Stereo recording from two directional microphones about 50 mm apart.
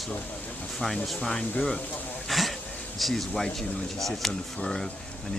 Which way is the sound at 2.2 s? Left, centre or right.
Centre.